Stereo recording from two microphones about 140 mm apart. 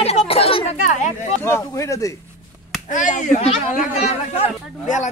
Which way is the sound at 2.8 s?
65° left (ahead or behind).